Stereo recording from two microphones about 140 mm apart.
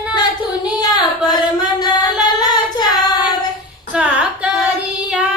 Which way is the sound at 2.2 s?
30° left (ahead or behind).